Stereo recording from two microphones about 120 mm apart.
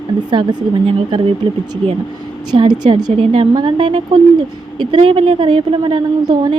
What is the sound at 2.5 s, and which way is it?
Speech, 35° right (ahead or behind).